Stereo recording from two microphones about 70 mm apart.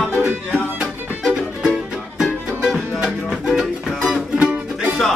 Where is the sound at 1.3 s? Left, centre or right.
Centre.